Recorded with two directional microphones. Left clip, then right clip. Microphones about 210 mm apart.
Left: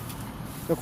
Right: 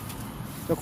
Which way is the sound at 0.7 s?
Centre (ahead or behind).